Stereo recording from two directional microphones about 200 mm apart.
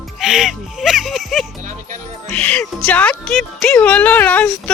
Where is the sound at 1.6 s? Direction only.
40° right (ahead or behind).